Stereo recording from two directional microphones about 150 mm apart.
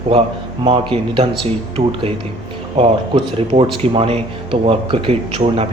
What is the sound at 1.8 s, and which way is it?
Speech, 45° right (ahead or behind).